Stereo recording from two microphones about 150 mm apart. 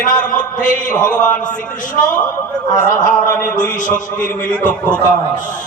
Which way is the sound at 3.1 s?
20° left (ahead or behind).